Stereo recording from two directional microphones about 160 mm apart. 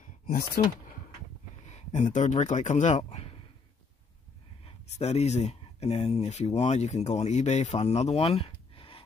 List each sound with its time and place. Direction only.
0.6 s speech: 60° left (ahead or behind)
1.7 s speech: 50° left (ahead or behind)
4.9 s speech: 45° left (ahead or behind)